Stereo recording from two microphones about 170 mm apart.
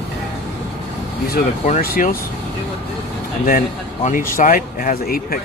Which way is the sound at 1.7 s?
55° left (ahead or behind).